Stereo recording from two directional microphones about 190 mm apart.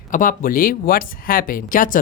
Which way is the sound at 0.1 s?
45° left (ahead or behind).